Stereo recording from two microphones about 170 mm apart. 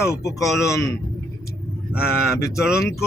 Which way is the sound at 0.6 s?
20° left (ahead or behind).